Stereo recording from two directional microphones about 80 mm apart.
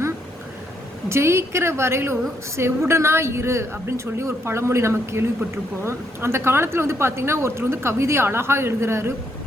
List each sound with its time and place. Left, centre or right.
1.0 s a woman's voice: right